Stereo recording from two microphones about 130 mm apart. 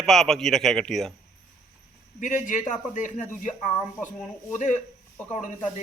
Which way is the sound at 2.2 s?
70° left (ahead or behind).